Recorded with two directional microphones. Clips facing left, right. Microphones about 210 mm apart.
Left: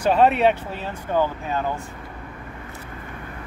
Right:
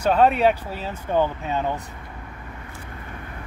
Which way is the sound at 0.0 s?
5° left (ahead or behind).